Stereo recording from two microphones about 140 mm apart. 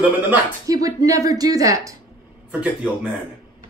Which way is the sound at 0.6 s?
25° right (ahead or behind).